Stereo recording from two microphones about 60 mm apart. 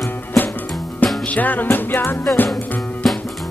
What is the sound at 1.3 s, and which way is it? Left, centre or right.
Music, left.